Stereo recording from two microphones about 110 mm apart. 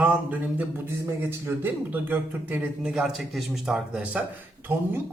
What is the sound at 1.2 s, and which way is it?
Speech, 20° right (ahead or behind).